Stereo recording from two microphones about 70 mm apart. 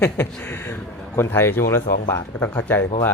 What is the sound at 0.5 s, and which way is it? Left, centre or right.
Speech, left.